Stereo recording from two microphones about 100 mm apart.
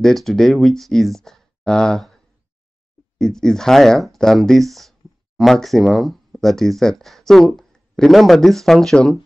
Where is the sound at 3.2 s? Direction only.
5° left (ahead or behind).